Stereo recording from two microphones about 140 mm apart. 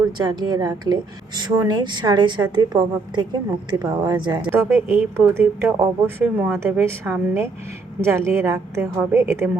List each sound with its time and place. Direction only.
0.0 s a woman's voice: 30° right (ahead or behind)
4.4 s a woman's voice: 15° right (ahead or behind)